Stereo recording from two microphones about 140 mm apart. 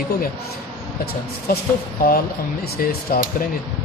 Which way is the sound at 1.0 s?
90° left.